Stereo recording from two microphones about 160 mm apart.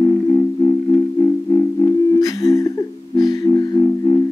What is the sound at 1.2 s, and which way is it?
Music, 20° left (ahead or behind).